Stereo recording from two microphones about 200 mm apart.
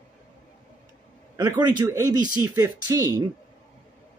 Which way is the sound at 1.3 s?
20° right (ahead or behind).